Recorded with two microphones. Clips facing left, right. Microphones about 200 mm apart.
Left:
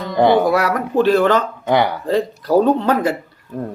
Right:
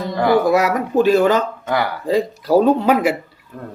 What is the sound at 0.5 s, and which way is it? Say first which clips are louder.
Speech: right 1 dB; 10° right (ahead or behind).